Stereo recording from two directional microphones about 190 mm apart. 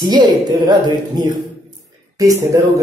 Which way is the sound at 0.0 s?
20° right (ahead or behind).